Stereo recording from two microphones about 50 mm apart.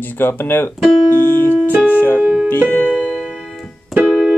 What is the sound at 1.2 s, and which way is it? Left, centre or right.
Music, left.